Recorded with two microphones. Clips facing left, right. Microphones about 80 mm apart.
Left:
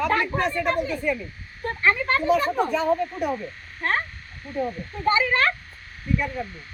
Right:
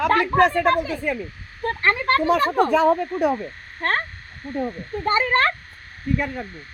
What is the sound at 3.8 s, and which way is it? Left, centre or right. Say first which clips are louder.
A woman's voice: right 2 dB; right.